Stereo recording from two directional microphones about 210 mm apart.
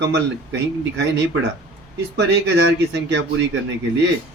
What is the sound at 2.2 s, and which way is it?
Speech, 55° right (ahead or behind).